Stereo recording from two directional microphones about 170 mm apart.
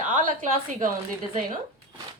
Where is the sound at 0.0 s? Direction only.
50° right (ahead or behind).